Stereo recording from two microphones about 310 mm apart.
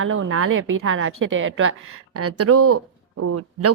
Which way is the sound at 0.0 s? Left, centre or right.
Right.